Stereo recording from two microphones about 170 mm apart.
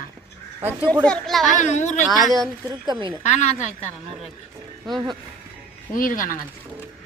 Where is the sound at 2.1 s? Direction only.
Centre (ahead or behind).